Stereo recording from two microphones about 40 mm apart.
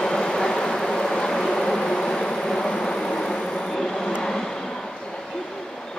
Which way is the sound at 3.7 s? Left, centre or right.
Centre.